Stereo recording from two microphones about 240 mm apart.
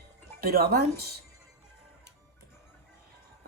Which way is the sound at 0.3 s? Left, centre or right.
Right.